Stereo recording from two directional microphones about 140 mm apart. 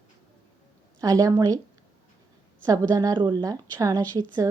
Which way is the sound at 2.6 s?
25° right (ahead or behind).